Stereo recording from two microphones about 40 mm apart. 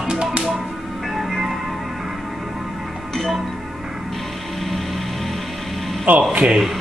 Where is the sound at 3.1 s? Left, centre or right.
Centre.